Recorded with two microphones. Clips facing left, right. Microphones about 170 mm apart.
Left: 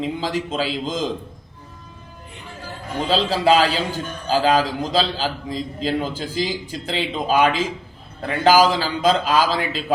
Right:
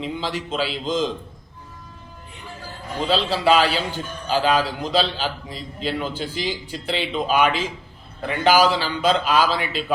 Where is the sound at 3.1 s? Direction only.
40° left (ahead or behind).